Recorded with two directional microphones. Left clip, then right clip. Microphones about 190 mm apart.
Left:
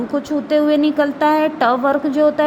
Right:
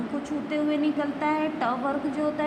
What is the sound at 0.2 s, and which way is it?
A woman's voice, 50° left (ahead or behind).